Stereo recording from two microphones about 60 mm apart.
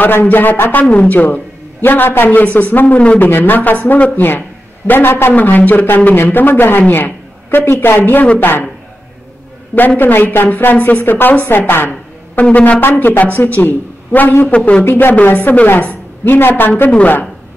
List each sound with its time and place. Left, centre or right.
0.0 s a woman's voice: left
5.3 s a woman's voice: left
6.9 s a sound: left
7.8 s a woman's voice: left
9.8 s a woman's voice: left
12.4 s speech: left
12.8 s a woman's voice: left
14.5 s speech: centre
14.8 s a woman's voice: left
16.9 s speech: left